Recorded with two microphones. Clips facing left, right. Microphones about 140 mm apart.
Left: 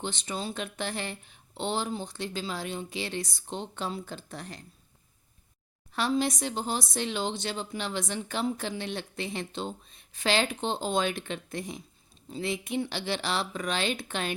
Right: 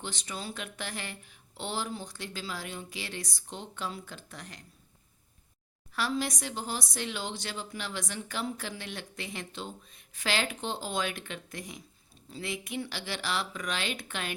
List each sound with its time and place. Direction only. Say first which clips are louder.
0.0 s speech: left 5 dB; 25° left (ahead or behind)
5.9 s speech: left 4 dB; 25° left (ahead or behind)